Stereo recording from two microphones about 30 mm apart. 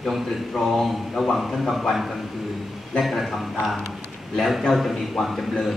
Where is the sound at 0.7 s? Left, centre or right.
Centre.